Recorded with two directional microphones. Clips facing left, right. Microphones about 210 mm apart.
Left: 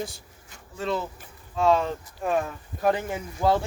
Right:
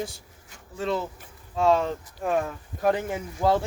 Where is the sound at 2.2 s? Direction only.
55° right (ahead or behind).